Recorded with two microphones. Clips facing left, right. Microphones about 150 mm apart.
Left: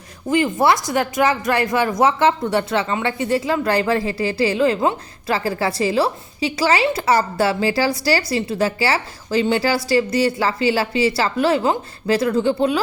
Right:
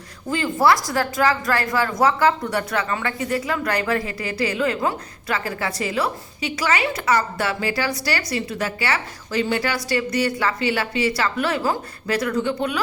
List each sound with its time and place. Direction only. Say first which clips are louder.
0.3 s a woman's voice: left 2 dB; 20° left (ahead or behind)